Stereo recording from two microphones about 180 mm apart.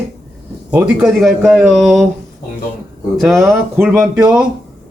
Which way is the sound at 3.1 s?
Centre (ahead or behind).